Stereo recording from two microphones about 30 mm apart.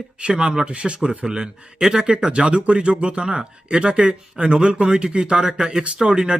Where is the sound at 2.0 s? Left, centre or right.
Right.